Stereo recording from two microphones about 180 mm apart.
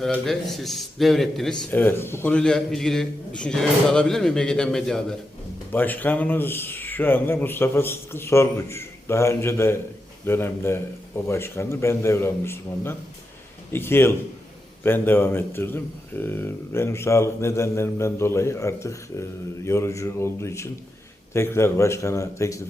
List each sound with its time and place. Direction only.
0.0 s speech: centre (ahead or behind); by 22.6 s 15° left (ahead or behind)